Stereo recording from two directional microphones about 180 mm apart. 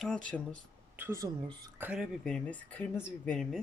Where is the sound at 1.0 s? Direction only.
15° right (ahead or behind).